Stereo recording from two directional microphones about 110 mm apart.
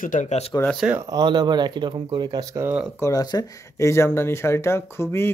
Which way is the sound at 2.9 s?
25° left (ahead or behind).